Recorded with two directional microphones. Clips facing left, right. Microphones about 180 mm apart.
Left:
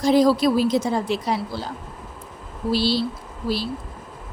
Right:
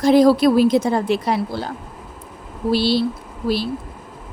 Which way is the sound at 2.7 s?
60° right (ahead or behind).